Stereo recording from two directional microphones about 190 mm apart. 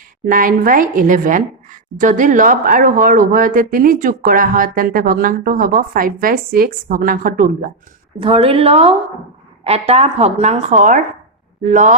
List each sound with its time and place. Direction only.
0.3 s a woman's voice: 45° right (ahead or behind)
8.2 s a woman's voice: 30° right (ahead or behind)